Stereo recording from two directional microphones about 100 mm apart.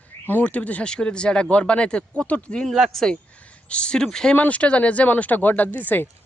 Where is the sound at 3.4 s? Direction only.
10° left (ahead or behind).